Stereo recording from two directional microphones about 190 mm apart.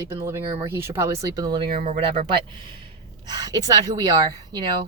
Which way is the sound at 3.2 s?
20° right (ahead or behind).